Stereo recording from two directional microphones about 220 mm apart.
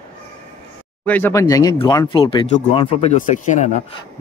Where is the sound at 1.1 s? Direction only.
10° left (ahead or behind); by 3.8 s 35° left (ahead or behind).